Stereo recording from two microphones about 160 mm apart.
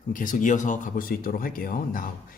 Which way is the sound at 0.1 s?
55° left (ahead or behind).